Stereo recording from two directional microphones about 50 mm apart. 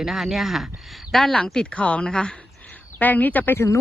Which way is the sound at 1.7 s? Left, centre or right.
Left.